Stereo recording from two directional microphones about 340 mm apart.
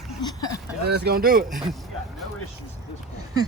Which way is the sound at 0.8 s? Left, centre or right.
Right.